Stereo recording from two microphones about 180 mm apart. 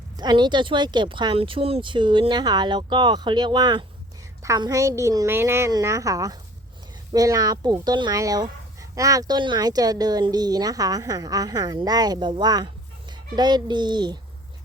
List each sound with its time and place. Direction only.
0.2 s a woman's voice: 25° right (ahead or behind)